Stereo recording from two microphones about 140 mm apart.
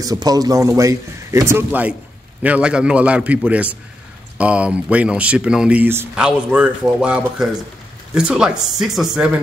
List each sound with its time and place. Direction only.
0.0 s a man's voice: 25° right (ahead or behind); by 9.4 s 5° right (ahead or behind)